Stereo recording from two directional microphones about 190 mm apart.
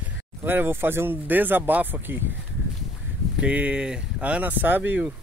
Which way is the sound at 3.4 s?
5° right (ahead or behind).